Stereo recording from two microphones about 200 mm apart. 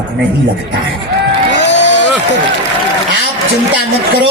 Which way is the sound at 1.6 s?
60° left (ahead or behind).